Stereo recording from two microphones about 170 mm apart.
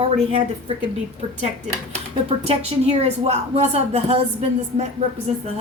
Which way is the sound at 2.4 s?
40° right (ahead or behind).